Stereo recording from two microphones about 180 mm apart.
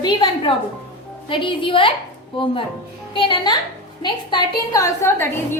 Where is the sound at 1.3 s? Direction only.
30° left (ahead or behind).